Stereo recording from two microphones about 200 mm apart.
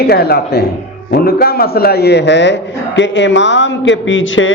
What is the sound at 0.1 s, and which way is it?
A man's voice, 50° left (ahead or behind).